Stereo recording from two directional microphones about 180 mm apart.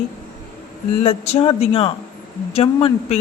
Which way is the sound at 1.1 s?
35° left (ahead or behind).